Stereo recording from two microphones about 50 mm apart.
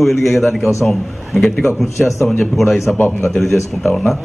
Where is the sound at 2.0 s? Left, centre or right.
Centre.